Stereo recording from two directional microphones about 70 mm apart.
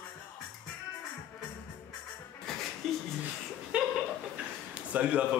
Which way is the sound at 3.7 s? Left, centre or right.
Centre.